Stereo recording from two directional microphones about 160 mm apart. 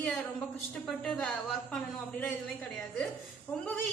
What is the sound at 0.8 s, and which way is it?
Speech, 5° left (ahead or behind).